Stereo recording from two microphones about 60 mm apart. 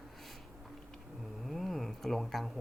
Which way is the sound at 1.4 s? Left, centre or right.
Centre.